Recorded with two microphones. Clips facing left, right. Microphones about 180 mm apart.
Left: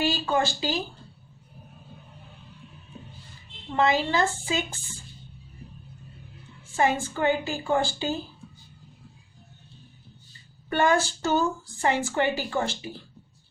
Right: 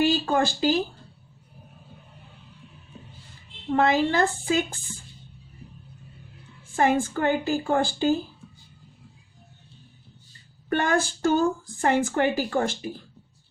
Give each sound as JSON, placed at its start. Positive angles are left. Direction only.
{"t": 0.3, "sound": "speech", "side_deg": -50}
{"t": 3.8, "sound": "speech", "side_deg": -55}
{"t": 6.7, "sound": "speech", "side_deg": -50}
{"t": 10.7, "sound": "speech", "side_deg": -50}